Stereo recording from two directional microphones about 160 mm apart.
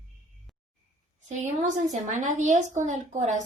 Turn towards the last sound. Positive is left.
turn(degrees=-50)  # may be behind; listen again after turning